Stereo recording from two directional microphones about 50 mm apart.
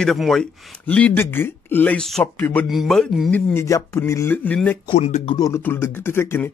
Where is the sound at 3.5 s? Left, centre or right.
Left.